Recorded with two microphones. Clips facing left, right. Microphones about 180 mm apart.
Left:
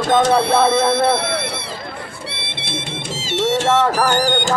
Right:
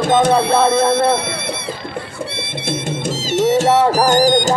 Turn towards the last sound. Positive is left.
turn(degrees=-40)  # may be behind; listen again after turning